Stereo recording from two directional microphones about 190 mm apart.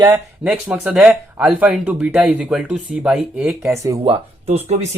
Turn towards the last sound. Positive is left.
turn(degrees=-35)  # may be behind; listen again after turning